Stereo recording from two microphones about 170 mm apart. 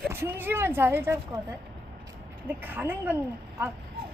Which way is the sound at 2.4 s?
10° right (ahead or behind).